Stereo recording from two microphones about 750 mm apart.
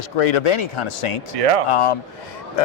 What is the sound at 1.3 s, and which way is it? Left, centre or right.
Speech, right.